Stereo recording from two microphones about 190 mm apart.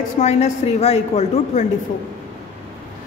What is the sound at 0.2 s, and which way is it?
A woman's voice, 35° left (ahead or behind).